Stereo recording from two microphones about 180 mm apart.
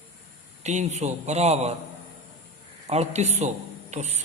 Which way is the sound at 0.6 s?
40° right (ahead or behind).